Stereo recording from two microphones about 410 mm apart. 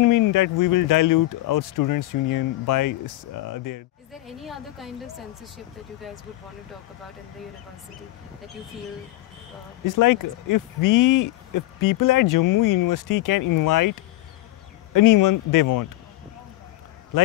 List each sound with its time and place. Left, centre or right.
0.0 s speech: left
4.3 s a woman's voice: centre
9.9 s speech: left
15.0 s speech: left